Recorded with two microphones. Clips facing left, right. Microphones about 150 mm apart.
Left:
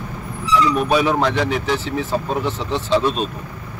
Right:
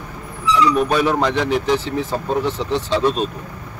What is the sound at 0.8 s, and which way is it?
A man's voice, 10° left (ahead or behind).